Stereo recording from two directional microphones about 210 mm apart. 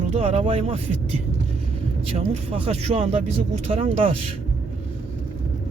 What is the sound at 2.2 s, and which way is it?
Speech, 30° right (ahead or behind).